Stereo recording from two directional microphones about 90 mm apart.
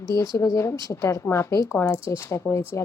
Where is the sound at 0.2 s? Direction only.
35° left (ahead or behind).